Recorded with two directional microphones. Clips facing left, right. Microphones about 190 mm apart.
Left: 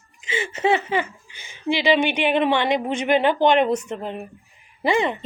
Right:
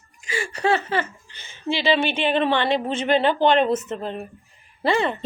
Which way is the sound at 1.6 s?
15° left (ahead or behind).